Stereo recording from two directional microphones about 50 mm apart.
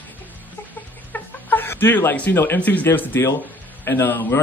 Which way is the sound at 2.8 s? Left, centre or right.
Left.